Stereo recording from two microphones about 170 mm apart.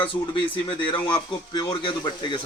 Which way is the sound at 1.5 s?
25° left (ahead or behind).